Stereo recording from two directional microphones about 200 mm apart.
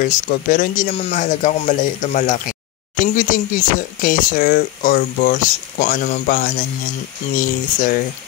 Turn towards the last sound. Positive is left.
turn(degrees=45)  # may be behind; listen again after turning